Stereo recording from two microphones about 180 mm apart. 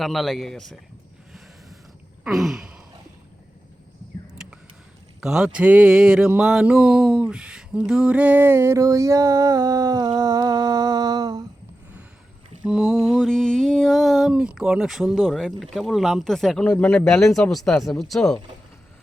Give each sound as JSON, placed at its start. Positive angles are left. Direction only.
{"t": 0.0, "sound": "speech", "side_deg": 0}
{"t": 2.2, "sound": "sigh", "side_deg": 0}
{"t": 5.2, "sound": "a sound", "side_deg": -5}
{"t": 10.2, "sound": "humming", "side_deg": -20}
{"t": 12.6, "sound": "a sound", "side_deg": -5}
{"t": 13.1, "sound": "speech", "side_deg": 5}